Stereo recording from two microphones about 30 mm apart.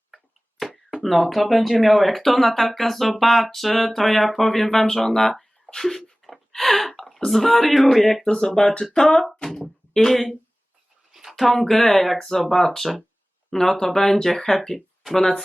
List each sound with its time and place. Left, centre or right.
0.6 s a sound: centre
1.0 s speech: centre
5.6 s a sound: centre
6.5 s gasp: centre
7.3 s speech: centre
8.2 s speech: centre
10.1 s speech: centre
11.1 s a sound: centre
11.3 s speech: centre